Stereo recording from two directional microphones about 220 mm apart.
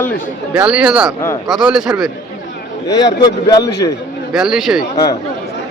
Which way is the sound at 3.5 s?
15° left (ahead or behind).